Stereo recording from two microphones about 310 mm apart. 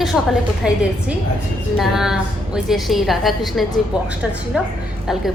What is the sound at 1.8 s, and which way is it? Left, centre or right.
A woman's voice, centre.